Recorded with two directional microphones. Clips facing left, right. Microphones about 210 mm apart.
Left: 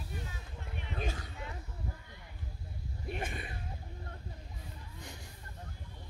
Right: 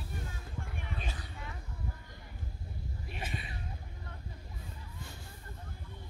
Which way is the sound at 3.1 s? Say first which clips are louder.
Left 3 dB; 50° left (ahead or behind).